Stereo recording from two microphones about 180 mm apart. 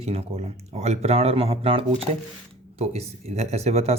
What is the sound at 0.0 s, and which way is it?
Speech, 35° right (ahead or behind).